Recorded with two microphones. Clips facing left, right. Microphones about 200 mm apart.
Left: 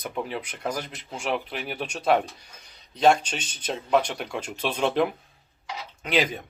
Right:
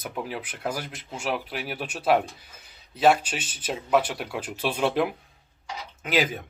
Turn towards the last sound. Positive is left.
turn(degrees=0)  # may be behind; listen again after turning